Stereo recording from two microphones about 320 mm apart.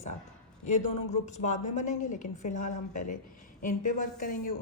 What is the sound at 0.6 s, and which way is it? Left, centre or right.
A woman's voice, left.